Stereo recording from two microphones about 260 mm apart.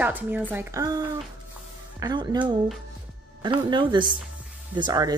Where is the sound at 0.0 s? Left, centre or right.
Centre.